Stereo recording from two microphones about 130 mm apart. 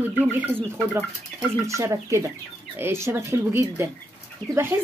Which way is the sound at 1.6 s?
25° right (ahead or behind).